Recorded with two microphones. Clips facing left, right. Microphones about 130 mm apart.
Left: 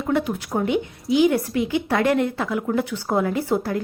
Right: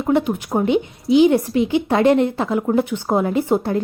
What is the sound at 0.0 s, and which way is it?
A woman's voice, 20° right (ahead or behind).